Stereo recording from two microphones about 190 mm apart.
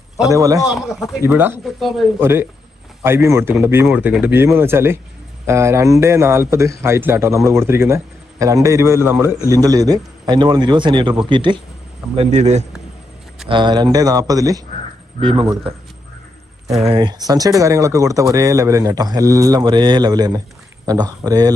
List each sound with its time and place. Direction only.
0.3 s a man's voice: 20° right (ahead or behind)
0.6 s a man's voice: centre (ahead or behind)
2.2 s a man's voice: 10° right (ahead or behind); by 12.6 s 35° right (ahead or behind)
13.5 s speech: 25° right (ahead or behind)
16.8 s speech: 25° right (ahead or behind)